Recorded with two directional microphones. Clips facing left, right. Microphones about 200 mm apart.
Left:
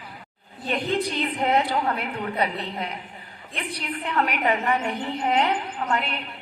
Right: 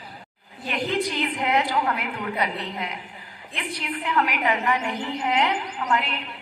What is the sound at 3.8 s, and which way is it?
A woman's voice, 35° left (ahead or behind).